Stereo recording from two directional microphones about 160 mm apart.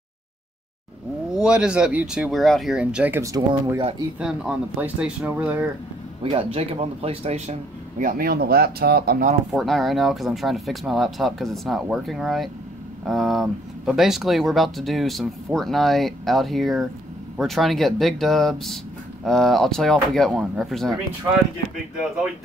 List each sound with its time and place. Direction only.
1.3 s speech: 5° right (ahead or behind)
3.2 s speech: 20° right (ahead or behind)
4.2 s speech: 5° right (ahead or behind)
6.2 s speech: 40° right (ahead or behind)
8.0 s speech: 60° right (ahead or behind)
9.5 s speech: centre (ahead or behind)